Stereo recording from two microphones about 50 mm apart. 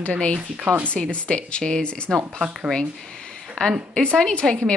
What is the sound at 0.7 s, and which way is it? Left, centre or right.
A woman's voice, centre.